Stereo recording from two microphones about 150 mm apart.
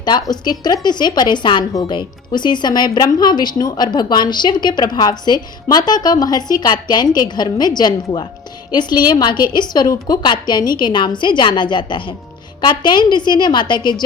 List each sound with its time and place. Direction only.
0.0 s speech: 30° left (ahead or behind)